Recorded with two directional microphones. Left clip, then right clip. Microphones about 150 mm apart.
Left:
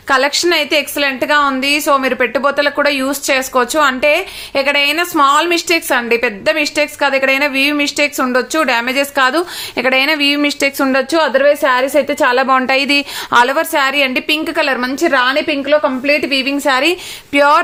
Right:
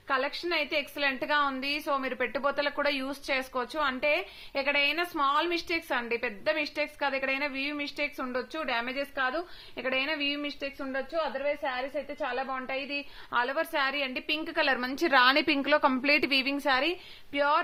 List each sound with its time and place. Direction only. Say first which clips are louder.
0.1 s a woman's voice: left 17 dB; 20° left (ahead or behind)
0.9 s a woman's voice: left 13 dB; centre (ahead or behind); by 10.8 s 35° left (ahead or behind)
11.1 s a woman's voice: left 18 dB; 90° left; by 13.1 s 60° left (ahead or behind)
13.3 s a woman's voice: left 18 dB; 25° left (ahead or behind)
13.6 s a woman's voice: left 16 dB; 10° left (ahead or behind)
14.8 s a woman's voice: left 15 dB; 15° right (ahead or behind)
15.0 s a woman's voice: left 9 dB; 30° right (ahead or behind)
15.6 s a woman's voice: left 12 dB; 55° right (ahead or behind); by 16.6 s 35° right (ahead or behind)
16.8 s a woman's voice: left 16 dB; 10° left (ahead or behind)